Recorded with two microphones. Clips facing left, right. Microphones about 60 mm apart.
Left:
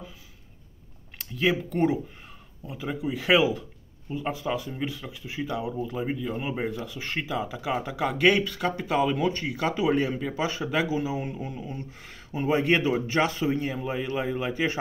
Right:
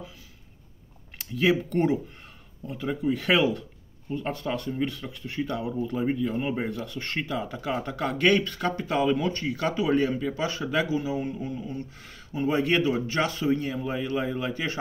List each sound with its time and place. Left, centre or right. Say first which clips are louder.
1.1 s speech: right 2 dB; centre